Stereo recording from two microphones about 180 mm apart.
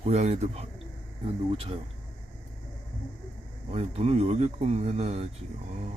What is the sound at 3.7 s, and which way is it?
Speech, 35° right (ahead or behind).